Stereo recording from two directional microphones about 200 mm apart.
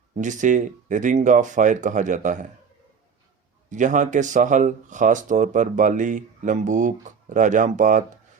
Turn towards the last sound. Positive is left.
turn(degrees=-40)  # may be behind; listen again after turning